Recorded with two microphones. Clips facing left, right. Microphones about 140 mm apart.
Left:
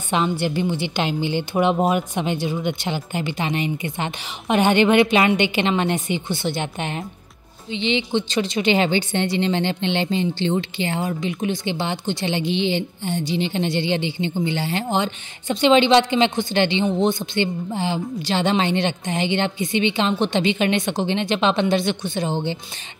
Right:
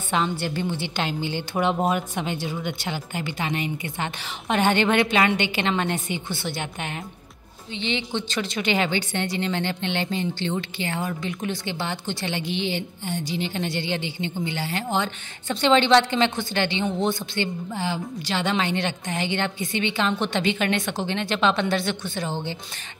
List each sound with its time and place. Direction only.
0.1 s speech: 15° left (ahead or behind)